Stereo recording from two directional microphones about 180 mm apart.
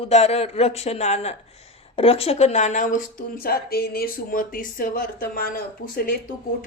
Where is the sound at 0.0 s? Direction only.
35° left (ahead or behind).